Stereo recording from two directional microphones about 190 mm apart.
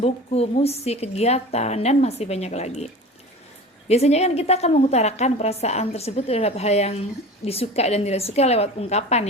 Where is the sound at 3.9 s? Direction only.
35° left (ahead or behind).